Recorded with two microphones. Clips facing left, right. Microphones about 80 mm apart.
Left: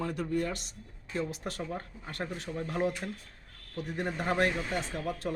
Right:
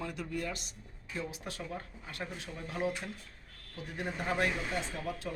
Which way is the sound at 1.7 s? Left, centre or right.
Left.